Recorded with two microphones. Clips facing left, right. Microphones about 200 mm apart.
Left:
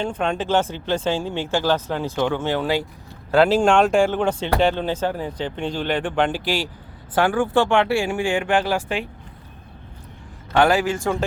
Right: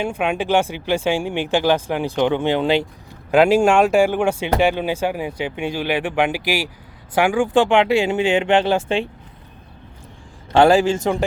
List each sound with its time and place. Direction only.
0.0 s speech: 10° right (ahead or behind); by 9.0 s 25° right (ahead or behind)
10.5 s speech: 30° right (ahead or behind)